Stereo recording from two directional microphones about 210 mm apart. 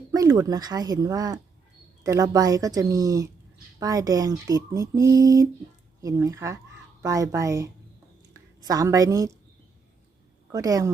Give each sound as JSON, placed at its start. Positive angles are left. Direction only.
{"t": 0.1, "sound": "a woman's voice", "side_deg": -15}
{"t": 10.5, "sound": "speech", "side_deg": -15}